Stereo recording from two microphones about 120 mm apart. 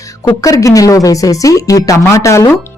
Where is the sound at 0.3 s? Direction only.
30° left (ahead or behind).